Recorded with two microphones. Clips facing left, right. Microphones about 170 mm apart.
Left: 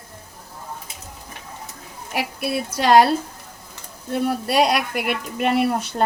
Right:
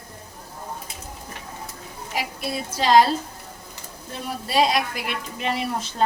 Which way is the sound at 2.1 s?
65° left (ahead or behind).